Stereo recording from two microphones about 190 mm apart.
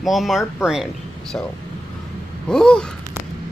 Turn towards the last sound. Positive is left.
turn(degrees=5)  # may be behind; listen again after turning